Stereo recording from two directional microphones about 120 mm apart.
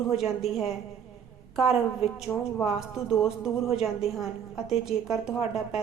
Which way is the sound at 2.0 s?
55° left (ahead or behind).